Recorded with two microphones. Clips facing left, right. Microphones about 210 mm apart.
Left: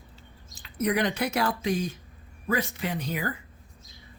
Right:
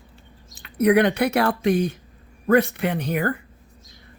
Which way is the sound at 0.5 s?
60° right (ahead or behind).